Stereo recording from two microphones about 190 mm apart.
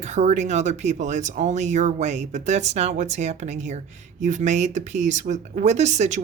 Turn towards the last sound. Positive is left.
turn(degrees=-35)  # may be behind; listen again after turning